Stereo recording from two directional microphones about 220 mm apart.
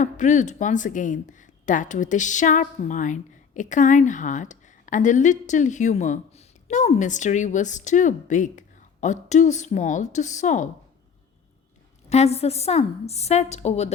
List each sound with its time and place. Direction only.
0.0 s speech: 35° left (ahead or behind)
12.0 s a woman's voice: 30° left (ahead or behind)